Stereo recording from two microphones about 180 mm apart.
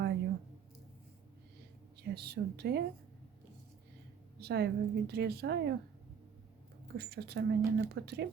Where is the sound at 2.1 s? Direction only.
60° right (ahead or behind).